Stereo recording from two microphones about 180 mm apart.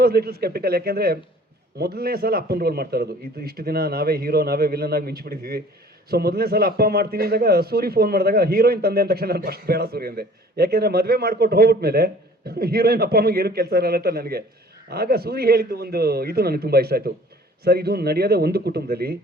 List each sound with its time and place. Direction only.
0.0 s a man's voice: 60° right (ahead or behind)